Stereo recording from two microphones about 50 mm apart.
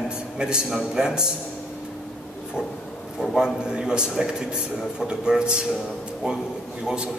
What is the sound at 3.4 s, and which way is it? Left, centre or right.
A man's voice, centre.